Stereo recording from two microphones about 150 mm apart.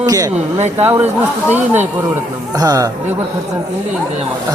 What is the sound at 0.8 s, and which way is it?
Speech, 10° right (ahead or behind).